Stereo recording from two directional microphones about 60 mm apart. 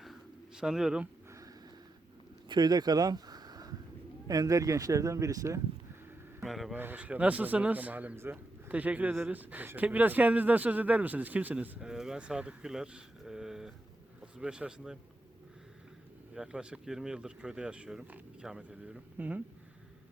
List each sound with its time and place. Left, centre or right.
0.0 s bird: centre
2.6 s speech: right
4.3 s speech: right
6.4 s speech: centre
6.9 s speech: right
8.1 s speech: right
8.7 s speech: right
11.8 s speech: centre
16.3 s speech: centre
19.1 s speech: right